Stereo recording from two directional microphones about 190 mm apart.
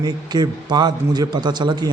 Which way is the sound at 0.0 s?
20° right (ahead or behind).